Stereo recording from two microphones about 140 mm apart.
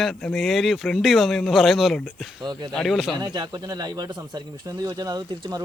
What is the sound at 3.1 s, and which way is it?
Speech, 30° right (ahead or behind).